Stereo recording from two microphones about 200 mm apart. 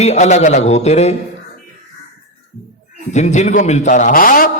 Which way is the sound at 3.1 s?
35° left (ahead or behind).